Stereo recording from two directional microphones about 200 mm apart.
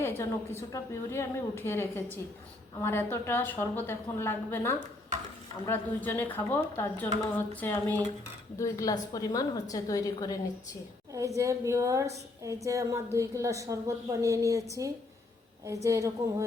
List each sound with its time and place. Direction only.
0.2 s a woman's voice: 15° left (ahead or behind)
11.3 s a woman's voice: 15° right (ahead or behind)